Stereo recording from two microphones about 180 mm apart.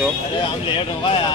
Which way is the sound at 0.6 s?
30° left (ahead or behind).